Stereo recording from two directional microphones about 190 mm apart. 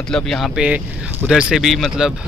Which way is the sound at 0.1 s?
Centre (ahead or behind).